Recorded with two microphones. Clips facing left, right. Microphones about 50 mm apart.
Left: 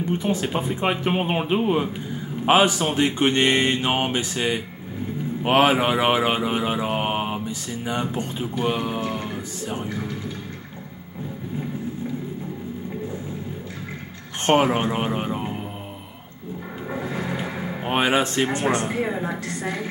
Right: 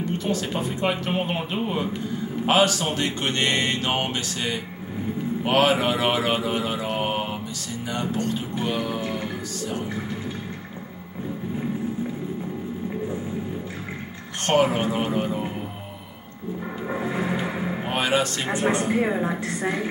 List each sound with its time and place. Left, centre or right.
0.2 s speech: centre
5.4 s mantra: left
8.6 s speech: centre
14.4 s speech: left
16.9 s a sound: centre
17.8 s speech: left
18.7 s a woman's voice: centre